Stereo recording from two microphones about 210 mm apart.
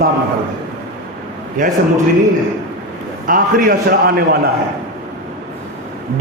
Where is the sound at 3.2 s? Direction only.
40° right (ahead or behind).